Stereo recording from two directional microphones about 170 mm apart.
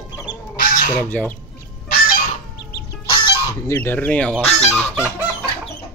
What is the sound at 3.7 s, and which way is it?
Goose, 15° left (ahead or behind).